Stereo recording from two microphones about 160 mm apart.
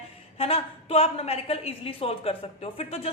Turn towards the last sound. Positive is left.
turn(degrees=40)  # may be behind; listen again after turning